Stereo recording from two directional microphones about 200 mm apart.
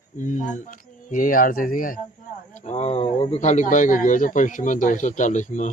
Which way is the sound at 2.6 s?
35° left (ahead or behind).